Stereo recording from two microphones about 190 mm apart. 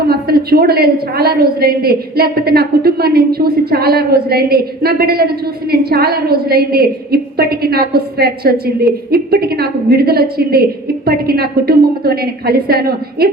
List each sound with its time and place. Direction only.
0.1 s a woman's voice: 55° right (ahead or behind)